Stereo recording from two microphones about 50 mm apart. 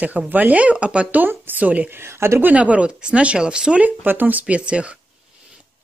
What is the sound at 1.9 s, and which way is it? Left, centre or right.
Speech, right.